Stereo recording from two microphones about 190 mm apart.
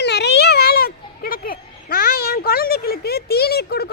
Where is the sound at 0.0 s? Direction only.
60° left (ahead or behind).